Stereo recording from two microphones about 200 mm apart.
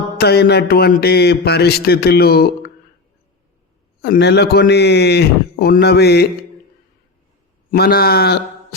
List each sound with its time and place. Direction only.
0.2 s speech: 55° left (ahead or behind)
4.0 s speech: 55° left (ahead or behind)
7.7 s speech: 50° left (ahead or behind)